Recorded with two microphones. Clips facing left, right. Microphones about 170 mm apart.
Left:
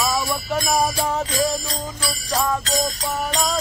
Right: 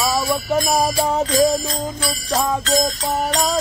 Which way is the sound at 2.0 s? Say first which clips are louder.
Right 1 dB; 30° right (ahead or behind).